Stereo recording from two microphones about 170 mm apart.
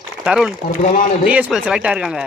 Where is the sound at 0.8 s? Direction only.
45° left (ahead or behind).